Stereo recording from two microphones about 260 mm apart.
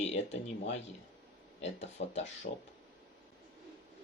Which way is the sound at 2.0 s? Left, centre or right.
Left.